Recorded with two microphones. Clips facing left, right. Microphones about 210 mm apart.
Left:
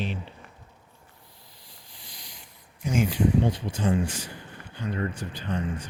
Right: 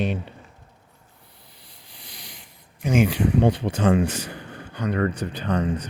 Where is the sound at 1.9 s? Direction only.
70° right (ahead or behind).